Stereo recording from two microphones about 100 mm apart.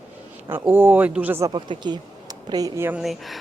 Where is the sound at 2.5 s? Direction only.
40° right (ahead or behind).